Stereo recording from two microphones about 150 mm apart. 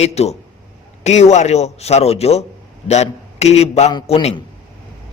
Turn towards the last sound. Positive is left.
turn(degrees=40)  # may be behind; listen again after turning